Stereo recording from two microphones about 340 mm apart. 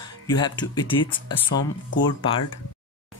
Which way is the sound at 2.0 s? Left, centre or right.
Centre.